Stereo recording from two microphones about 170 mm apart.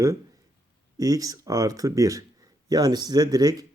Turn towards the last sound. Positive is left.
turn(degrees=-20)  # may be behind; listen again after turning